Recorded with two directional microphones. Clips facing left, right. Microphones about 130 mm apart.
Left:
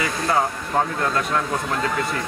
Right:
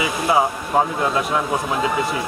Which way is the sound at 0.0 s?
15° right (ahead or behind).